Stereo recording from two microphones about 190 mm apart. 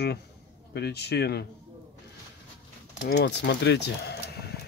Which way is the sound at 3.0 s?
65° left (ahead or behind).